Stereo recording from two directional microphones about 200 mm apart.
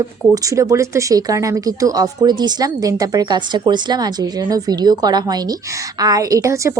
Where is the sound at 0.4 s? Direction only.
15° right (ahead or behind).